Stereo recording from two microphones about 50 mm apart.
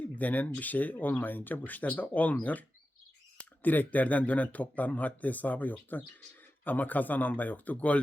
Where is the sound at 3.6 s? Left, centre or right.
Left.